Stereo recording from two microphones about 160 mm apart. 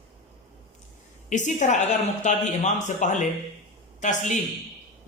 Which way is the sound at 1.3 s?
50° left (ahead or behind).